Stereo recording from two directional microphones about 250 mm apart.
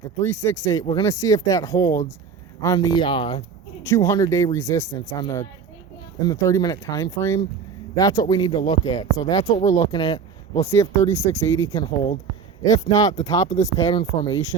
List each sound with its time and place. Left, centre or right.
0.2 s speech: centre
10.7 s speech: centre